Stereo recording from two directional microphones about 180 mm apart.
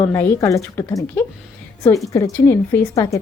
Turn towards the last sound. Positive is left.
turn(degrees=15)  # may be behind; listen again after turning